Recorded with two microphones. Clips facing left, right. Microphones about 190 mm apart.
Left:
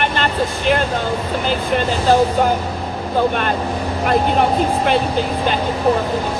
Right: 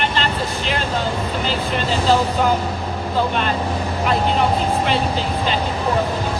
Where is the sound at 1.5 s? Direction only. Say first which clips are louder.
Left 5 dB; 50° left (ahead or behind).